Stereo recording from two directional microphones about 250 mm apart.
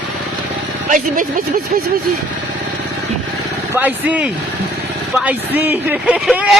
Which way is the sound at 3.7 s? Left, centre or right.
Centre.